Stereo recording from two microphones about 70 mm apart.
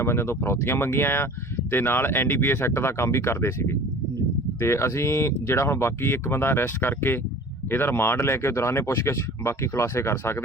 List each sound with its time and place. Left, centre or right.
0.0 s speech: left